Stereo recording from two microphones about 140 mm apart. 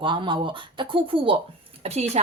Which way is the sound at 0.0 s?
35° right (ahead or behind).